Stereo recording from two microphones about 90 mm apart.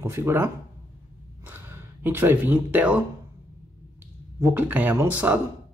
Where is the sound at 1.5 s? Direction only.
20° right (ahead or behind).